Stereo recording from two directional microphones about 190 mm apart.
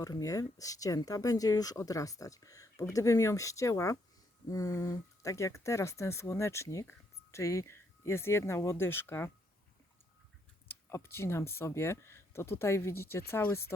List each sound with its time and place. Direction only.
0.0 s speech: 20° left (ahead or behind)
10.7 s speech: 15° left (ahead or behind)